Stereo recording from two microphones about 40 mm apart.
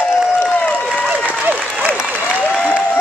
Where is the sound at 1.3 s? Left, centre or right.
Right.